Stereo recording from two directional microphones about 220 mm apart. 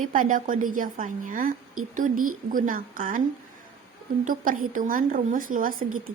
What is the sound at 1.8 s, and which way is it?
Speech, 75° right (ahead or behind).